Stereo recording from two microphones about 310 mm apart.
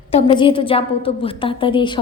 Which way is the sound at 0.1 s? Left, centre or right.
Centre.